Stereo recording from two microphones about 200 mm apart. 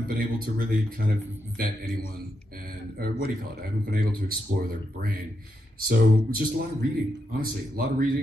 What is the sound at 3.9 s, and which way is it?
Speech, 50° right (ahead or behind).